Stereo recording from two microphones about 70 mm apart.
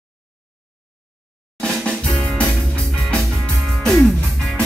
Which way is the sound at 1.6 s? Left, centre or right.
Centre.